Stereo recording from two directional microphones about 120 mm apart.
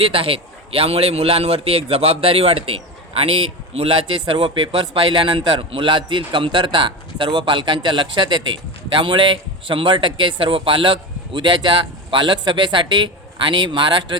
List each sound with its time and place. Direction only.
0.0 s a man's voice: 50° right (ahead or behind)